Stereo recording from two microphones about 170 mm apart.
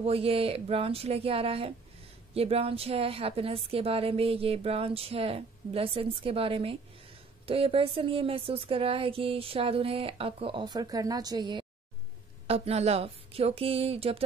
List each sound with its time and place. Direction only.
0.0 s a woman's voice: 35° right (ahead or behind)
12.4 s a woman's voice: 35° right (ahead or behind)